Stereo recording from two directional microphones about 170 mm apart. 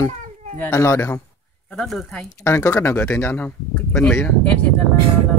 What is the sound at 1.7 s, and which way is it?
Speech, centre (ahead or behind).